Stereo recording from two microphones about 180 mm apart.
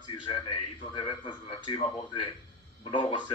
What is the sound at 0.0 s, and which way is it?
A man's voice, 25° left (ahead or behind).